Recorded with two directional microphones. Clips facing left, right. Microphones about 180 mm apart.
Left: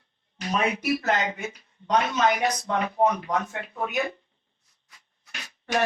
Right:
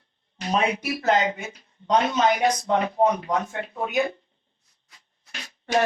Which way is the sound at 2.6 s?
30° right (ahead or behind).